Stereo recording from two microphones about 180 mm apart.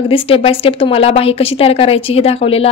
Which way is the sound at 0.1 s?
30° left (ahead or behind).